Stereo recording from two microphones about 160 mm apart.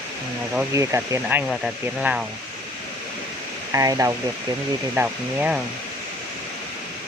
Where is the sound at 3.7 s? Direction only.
20° right (ahead or behind).